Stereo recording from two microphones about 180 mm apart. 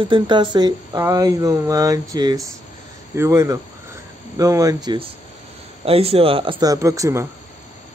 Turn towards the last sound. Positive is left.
turn(degrees=-15)  # may be behind; listen again after turning